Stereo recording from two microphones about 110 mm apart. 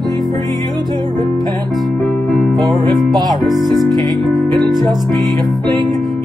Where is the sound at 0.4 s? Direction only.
40° right (ahead or behind).